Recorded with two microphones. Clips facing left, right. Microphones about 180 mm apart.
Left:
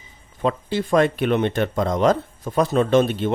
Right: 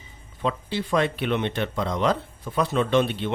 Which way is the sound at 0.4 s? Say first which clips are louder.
Left 5 dB; 45° left (ahead or behind).